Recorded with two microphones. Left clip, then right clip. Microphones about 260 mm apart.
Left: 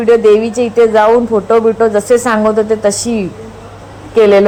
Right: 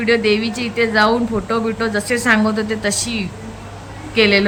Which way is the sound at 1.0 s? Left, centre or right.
Centre.